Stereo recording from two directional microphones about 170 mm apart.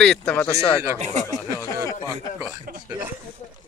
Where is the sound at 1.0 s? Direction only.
40° right (ahead or behind).